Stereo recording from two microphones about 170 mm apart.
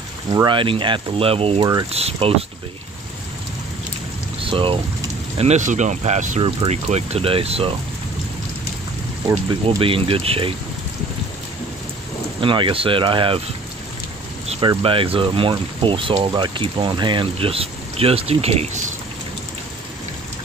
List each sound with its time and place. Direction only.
0.3 s speech: 25° right (ahead or behind)
4.4 s speech: 30° right (ahead or behind)
5.4 s speech: 45° right (ahead or behind)
9.7 s speech: 30° right (ahead or behind)
12.4 s speech: 30° right (ahead or behind)
14.5 s speech: 30° right (ahead or behind)